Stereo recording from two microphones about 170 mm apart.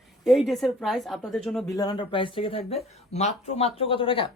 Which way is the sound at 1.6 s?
20° left (ahead or behind).